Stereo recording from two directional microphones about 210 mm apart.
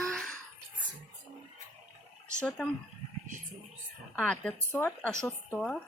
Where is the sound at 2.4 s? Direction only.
5° left (ahead or behind).